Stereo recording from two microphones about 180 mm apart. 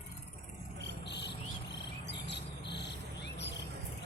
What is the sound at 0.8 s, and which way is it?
Cricket, 70° left (ahead or behind).